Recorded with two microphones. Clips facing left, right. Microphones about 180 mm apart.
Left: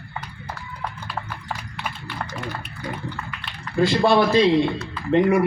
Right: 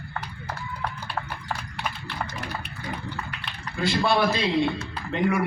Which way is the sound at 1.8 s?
Centre (ahead or behind).